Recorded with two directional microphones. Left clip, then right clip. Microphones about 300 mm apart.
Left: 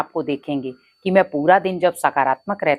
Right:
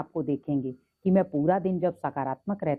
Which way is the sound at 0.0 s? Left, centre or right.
Centre.